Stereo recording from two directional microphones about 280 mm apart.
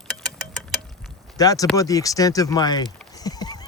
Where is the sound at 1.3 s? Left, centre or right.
Centre.